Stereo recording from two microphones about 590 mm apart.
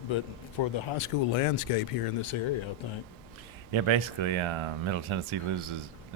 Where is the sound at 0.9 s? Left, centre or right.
Left.